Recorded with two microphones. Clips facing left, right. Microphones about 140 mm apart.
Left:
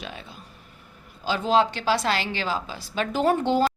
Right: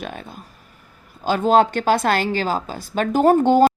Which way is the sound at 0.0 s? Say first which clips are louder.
Right 6 dB; 50° right (ahead or behind).